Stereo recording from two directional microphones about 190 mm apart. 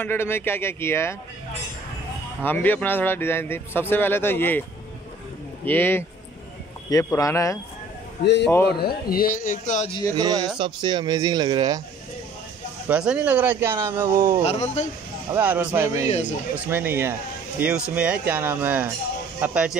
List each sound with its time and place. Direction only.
0.0 s a man's voice: 10° left (ahead or behind)
2.4 s a man's voice: 10° left (ahead or behind)
5.7 s a man's voice: 10° left (ahead or behind)
8.2 s a man's voice: 65° left (ahead or behind)
8.6 s a man's voice: 55° left (ahead or behind)
10.1 s speech: 20° right (ahead or behind)
12.8 s speech: 5° right (ahead or behind)
14.4 s speech: 35° left (ahead or behind)
15.3 s speech: 10° right (ahead or behind)
16.1 s speech: 40° left (ahead or behind)
16.5 s speech: 10° right (ahead or behind)